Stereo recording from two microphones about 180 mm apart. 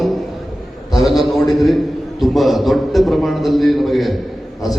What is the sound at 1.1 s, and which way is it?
A man's voice, centre (ahead or behind).